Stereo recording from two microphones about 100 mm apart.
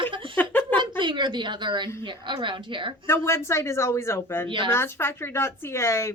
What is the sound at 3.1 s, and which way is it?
A woman's voice, 25° left (ahead or behind).